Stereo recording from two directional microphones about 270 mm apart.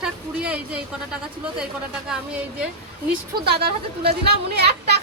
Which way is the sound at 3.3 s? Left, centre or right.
Right.